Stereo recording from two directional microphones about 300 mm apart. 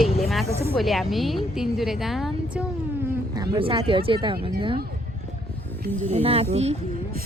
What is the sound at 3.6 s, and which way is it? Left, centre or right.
Speech, centre.